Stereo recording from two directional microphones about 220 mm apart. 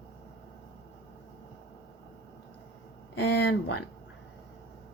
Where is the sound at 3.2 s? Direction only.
50° left (ahead or behind).